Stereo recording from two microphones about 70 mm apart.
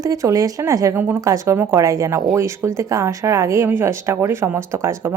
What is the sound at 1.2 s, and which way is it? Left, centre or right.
Speech, right.